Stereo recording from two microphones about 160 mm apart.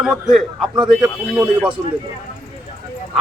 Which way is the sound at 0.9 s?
5° right (ahead or behind).